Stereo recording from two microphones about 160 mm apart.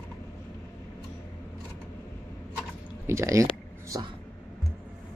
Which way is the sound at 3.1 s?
20° right (ahead or behind).